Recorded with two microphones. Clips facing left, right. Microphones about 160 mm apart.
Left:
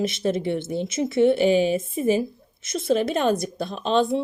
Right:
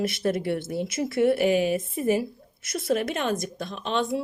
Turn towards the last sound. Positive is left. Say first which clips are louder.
# left 5 dB
turn(degrees=30)  # may be behind; listen again after turning